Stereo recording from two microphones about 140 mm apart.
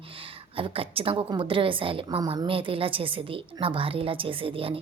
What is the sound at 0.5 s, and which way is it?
A woman's voice, 40° right (ahead or behind).